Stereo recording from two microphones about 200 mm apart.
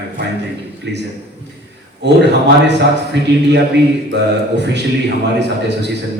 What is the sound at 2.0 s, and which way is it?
A man's voice, 60° right (ahead or behind).